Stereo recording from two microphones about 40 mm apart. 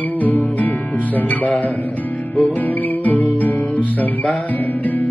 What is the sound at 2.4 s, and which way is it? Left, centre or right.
Music, left.